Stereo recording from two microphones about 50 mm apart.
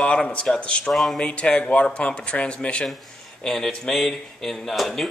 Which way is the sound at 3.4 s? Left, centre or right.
Centre.